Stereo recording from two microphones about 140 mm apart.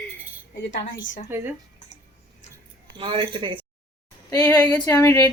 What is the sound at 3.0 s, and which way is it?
Speech, 40° right (ahead or behind).